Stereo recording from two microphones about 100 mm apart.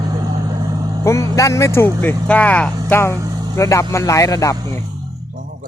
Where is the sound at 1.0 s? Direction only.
30° left (ahead or behind); by 2.9 s 15° left (ahead or behind).